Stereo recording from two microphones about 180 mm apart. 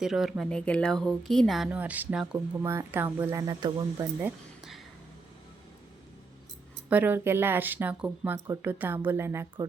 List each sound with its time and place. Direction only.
0.0 s speech: centre (ahead or behind); by 3.8 s 20° right (ahead or behind)
3.9 s speech: 5° right (ahead or behind)
6.9 s speech: 10° right (ahead or behind)